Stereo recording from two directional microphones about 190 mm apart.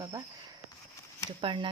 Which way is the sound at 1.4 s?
25° right (ahead or behind).